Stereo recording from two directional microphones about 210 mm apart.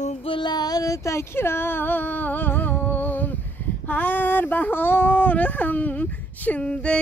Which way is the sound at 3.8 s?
10° left (ahead or behind).